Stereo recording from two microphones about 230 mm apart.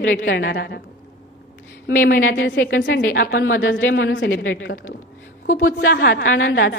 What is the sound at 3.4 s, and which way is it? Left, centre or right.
Speech, left.